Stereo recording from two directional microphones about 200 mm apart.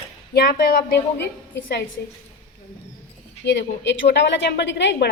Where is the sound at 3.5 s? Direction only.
60° left (ahead or behind).